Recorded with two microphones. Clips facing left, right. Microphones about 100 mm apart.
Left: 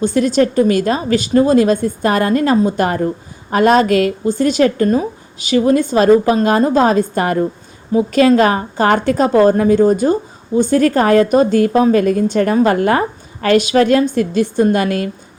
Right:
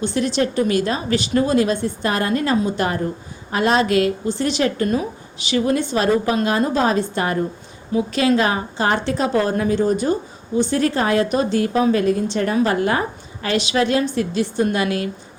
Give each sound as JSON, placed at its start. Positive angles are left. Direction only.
{"t": 0.0, "sound": "a woman's voice", "side_deg": 45}